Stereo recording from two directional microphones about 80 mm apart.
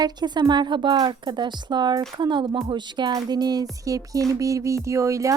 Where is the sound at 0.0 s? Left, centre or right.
Right.